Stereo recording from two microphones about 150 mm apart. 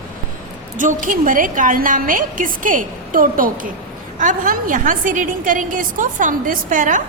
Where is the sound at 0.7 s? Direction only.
60° right (ahead or behind).